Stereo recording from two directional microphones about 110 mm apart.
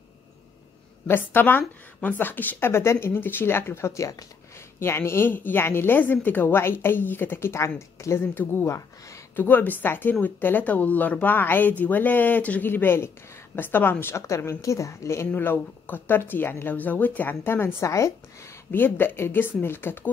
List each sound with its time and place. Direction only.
1.0 s a woman's voice: 20° left (ahead or behind)